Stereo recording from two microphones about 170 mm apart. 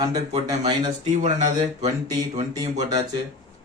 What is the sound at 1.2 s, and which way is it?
Speech, 40° right (ahead or behind).